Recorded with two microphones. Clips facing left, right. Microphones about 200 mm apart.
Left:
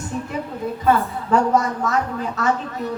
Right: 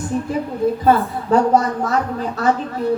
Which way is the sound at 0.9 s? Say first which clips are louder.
Even; 35° right (ahead or behind).